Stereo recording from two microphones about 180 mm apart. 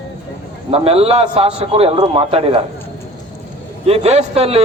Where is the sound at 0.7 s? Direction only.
35° right (ahead or behind).